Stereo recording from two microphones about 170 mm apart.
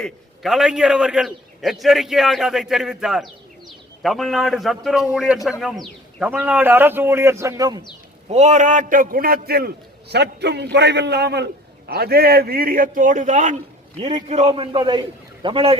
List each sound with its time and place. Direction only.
0.0 s a man's voice: centre (ahead or behind); by 7.8 s 20° right (ahead or behind)
8.3 s a man's voice: 40° right (ahead or behind)
14.0 s a man's voice: 25° right (ahead or behind)
14.3 s a man's voice: 40° right (ahead or behind)